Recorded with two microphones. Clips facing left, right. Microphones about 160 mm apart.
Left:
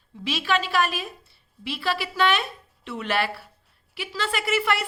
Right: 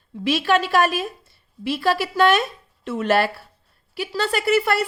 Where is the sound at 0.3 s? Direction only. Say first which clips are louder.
Right 6 dB; 45° right (ahead or behind).